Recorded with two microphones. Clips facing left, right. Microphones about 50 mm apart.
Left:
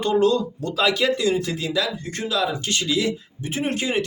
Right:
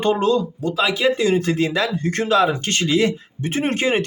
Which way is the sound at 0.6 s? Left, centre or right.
Centre.